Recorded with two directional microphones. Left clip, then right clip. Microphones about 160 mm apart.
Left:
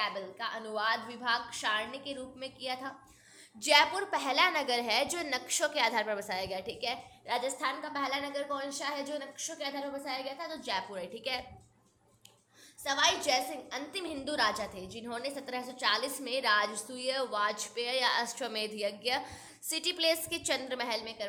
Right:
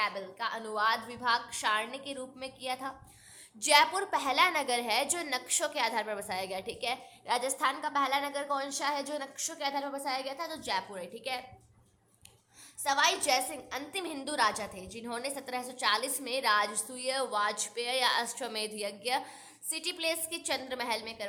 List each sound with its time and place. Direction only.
0.0 s a woman's voice: 15° right (ahead or behind)
10.7 s a woman's voice: 10° right (ahead or behind)
12.8 s a woman's voice: 15° right (ahead or behind)